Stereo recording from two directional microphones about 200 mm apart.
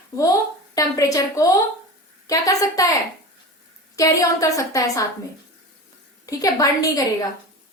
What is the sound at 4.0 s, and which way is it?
A woman's voice, 15° left (ahead or behind).